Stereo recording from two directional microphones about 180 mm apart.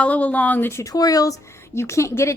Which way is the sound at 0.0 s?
10° left (ahead or behind).